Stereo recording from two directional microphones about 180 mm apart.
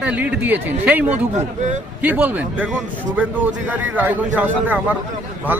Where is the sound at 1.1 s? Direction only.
40° right (ahead or behind).